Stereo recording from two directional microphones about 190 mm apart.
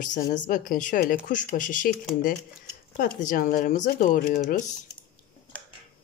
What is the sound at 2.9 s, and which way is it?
Speech, 45° left (ahead or behind).